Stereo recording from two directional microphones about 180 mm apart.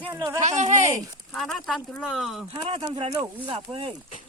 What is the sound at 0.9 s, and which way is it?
Speech, 20° right (ahead or behind).